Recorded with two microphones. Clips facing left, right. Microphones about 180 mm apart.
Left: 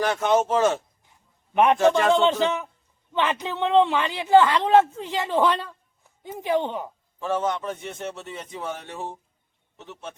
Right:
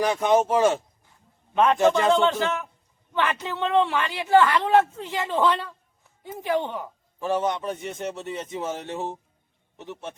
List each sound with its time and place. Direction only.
0.0 s speech: 15° right (ahead or behind)
1.5 s a woman's voice: 20° left (ahead or behind)
1.8 s speech: 20° right (ahead or behind)
2.1 s a woman's voice: 20° left (ahead or behind)
7.2 s speech: 15° right (ahead or behind)